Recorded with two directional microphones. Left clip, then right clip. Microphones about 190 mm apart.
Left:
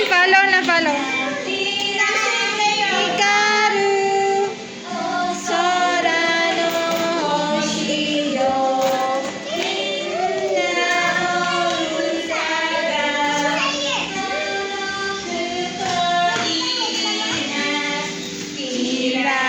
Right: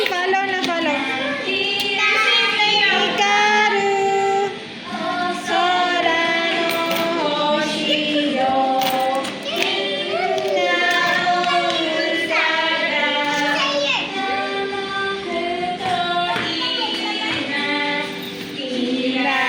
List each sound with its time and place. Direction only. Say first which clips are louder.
0.1 s a sound: left 6 dB; 5° right (ahead or behind)
3.2 s music: left 1 dB; 10° right (ahead or behind)
5.6 s music: even; 15° right (ahead or behind)